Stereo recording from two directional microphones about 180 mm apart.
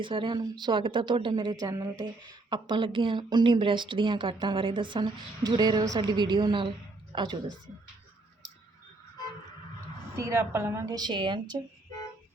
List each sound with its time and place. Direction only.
0.0 s speech: 30° right (ahead or behind)
10.2 s speech: 15° right (ahead or behind)